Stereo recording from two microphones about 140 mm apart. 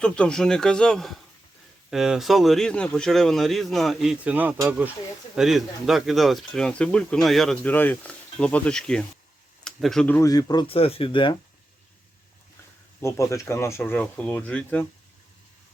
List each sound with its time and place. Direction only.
0.0 s speech: 5° left (ahead or behind); by 4.9 s 15° right (ahead or behind)
5.3 s speech: 5° right (ahead or behind)
10.2 s speech: 25° left (ahead or behind)
10.7 s speech: 45° left (ahead or behind)
13.0 s speech: 20° left (ahead or behind)